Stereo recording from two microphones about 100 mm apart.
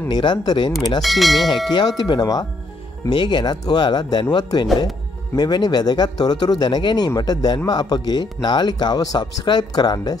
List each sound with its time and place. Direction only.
0.1 s speech: 45° left (ahead or behind)
1.0 s speech: centre (ahead or behind)
1.7 s speech: 50° left (ahead or behind)